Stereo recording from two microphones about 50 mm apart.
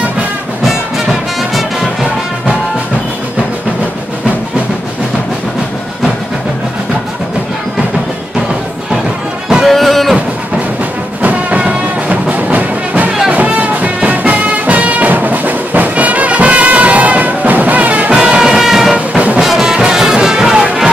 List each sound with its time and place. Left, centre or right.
9.7 s cattle: centre
11.2 s music: right
18.1 s music: centre
18.6 s vehicle: centre
19.1 s music: right
19.4 s music: centre